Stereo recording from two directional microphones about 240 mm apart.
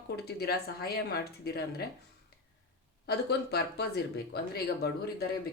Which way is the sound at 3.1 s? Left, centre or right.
Left.